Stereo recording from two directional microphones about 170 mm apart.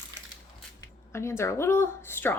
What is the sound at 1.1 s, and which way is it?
A woman's voice, 15° left (ahead or behind).